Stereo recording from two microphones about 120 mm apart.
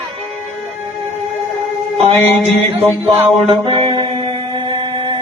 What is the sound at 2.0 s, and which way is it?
Music, 65° right (ahead or behind).